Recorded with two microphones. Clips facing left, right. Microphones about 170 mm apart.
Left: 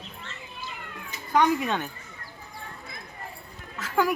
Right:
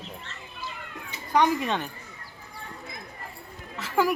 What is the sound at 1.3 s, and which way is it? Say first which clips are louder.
Speech: even; centre (ahead or behind).